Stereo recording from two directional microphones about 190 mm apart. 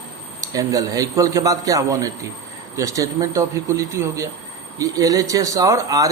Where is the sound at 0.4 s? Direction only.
15° right (ahead or behind).